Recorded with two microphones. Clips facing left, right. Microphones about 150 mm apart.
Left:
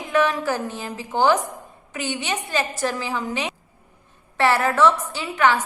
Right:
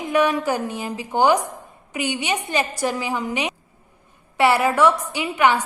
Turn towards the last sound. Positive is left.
turn(degrees=-15)  # may be behind; listen again after turning